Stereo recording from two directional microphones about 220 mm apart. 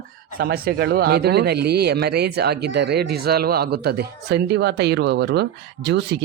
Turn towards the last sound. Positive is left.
turn(degrees=-50)  # may be behind; listen again after turning